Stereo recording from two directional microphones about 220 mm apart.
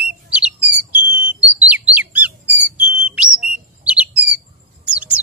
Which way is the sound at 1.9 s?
5° right (ahead or behind).